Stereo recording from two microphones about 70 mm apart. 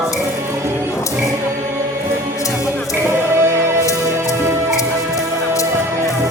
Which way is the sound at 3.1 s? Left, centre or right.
Right.